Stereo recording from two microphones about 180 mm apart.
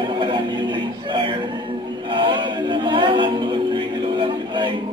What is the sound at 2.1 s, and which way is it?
Music, 25° right (ahead or behind).